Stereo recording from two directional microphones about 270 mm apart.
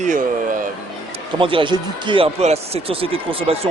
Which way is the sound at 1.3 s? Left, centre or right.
Centre.